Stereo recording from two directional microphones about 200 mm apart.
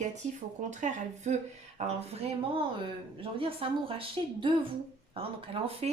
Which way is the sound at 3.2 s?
25° right (ahead or behind).